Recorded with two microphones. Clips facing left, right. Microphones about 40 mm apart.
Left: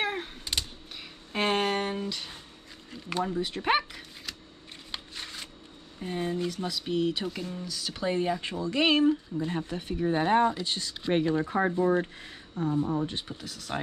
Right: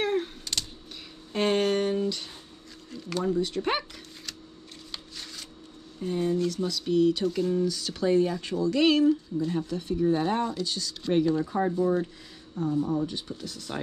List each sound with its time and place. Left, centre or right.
0.0 s a sound: centre
4.9 s shuffling cards: left
5.9 s speech: left
7.5 s speech: centre
7.9 s speech: left